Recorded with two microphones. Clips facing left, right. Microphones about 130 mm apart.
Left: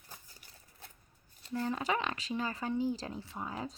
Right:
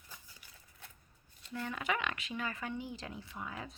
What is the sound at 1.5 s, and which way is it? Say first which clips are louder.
Speech: left 4 dB; 35° left (ahead or behind).